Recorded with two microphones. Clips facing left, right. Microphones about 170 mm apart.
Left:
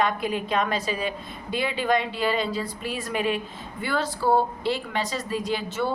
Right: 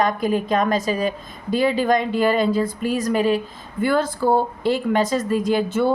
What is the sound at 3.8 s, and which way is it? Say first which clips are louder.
Speech: right 7 dB; 50° right (ahead or behind).